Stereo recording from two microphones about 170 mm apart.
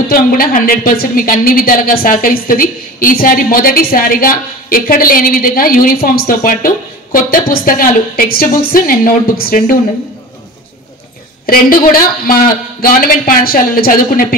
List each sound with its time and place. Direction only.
0.1 s a woman's voice: 55° left (ahead or behind)
11.4 s a woman's voice: 60° left (ahead or behind)